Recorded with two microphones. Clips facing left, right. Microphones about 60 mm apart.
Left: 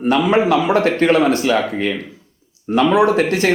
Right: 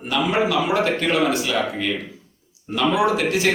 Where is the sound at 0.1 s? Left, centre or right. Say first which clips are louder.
Left 6 dB; left.